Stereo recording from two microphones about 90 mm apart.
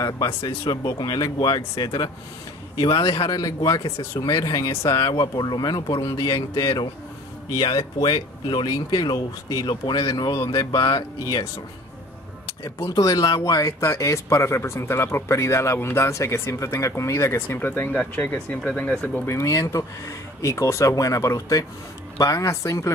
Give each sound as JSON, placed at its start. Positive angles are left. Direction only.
{"t": 0.7, "sound": "speech", "side_deg": 45}
{"t": 4.6, "sound": "speech", "side_deg": 40}
{"t": 5.1, "sound": "speech", "side_deg": 50}
{"t": 6.0, "sound": "speech", "side_deg": 40}
{"t": 7.5, "sound": "speech", "side_deg": 50}
{"t": 12.6, "sound": "speech", "side_deg": 45}
{"t": 19.3, "sound": "speech", "side_deg": 35}